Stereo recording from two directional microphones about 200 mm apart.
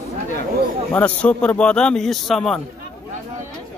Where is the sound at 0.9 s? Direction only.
5° left (ahead or behind).